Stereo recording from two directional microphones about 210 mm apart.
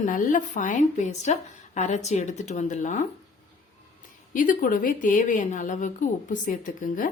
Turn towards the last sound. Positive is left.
turn(degrees=40)  # may be behind; listen again after turning